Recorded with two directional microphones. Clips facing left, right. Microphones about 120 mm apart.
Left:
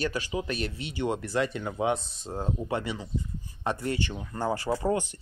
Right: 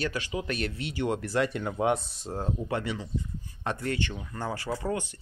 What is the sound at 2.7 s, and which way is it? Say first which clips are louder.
Speech: even; 25° left (ahead or behind).